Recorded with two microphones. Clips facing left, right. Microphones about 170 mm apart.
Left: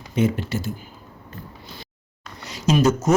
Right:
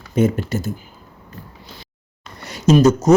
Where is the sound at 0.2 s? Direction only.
45° right (ahead or behind).